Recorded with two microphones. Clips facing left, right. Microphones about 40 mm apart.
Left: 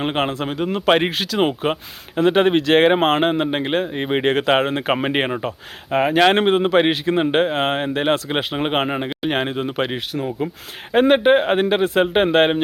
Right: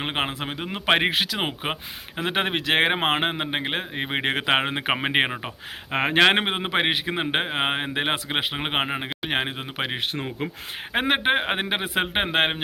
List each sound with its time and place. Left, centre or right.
0.0 s speech: centre
5.9 s speech: right; by 9.9 s centre
10.1 s speech: centre